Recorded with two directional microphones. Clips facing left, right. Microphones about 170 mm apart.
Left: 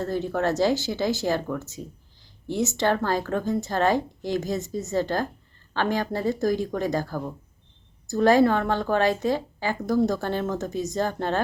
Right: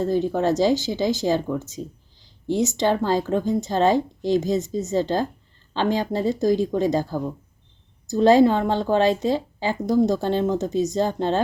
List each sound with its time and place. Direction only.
0.0 s a woman's voice: 15° right (ahead or behind)